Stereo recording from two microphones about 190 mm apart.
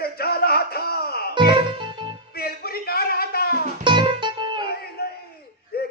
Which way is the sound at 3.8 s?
25° right (ahead or behind).